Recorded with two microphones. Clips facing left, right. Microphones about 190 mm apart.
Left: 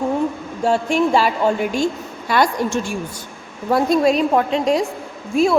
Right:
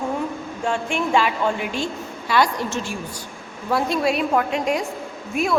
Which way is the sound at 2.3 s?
50° left (ahead or behind).